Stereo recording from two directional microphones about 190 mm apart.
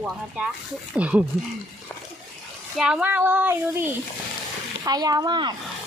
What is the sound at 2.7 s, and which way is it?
Speech, 5° right (ahead or behind).